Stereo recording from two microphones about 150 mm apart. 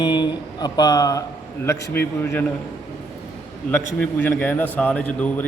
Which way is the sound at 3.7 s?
10° left (ahead or behind).